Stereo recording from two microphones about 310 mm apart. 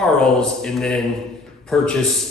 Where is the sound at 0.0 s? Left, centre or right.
Centre.